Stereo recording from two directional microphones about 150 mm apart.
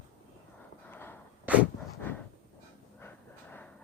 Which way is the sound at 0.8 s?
15° left (ahead or behind).